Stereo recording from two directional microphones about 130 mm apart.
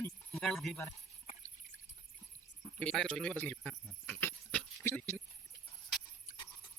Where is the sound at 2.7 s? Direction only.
5° left (ahead or behind).